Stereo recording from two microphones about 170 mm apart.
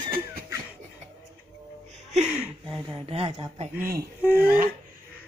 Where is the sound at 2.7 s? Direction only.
35° right (ahead or behind).